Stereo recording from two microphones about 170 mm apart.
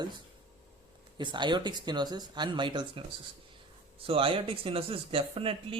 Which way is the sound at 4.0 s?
30° right (ahead or behind).